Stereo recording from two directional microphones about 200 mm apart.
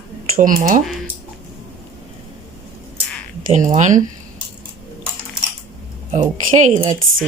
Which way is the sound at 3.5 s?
40° right (ahead or behind).